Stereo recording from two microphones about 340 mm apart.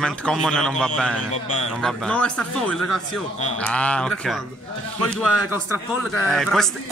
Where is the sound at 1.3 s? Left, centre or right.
Centre.